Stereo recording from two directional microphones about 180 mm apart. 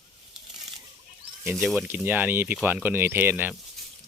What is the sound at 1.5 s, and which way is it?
Speech, 5° right (ahead or behind).